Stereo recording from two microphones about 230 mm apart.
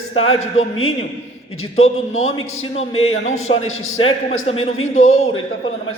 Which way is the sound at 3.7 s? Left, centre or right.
Left.